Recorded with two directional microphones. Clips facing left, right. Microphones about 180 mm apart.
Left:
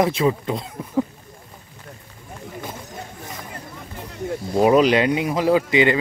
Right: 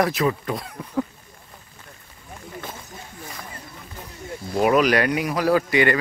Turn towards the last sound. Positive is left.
turn(degrees=20)  # may be behind; listen again after turning